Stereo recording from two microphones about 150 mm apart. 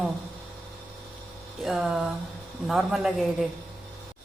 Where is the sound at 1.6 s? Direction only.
5° right (ahead or behind).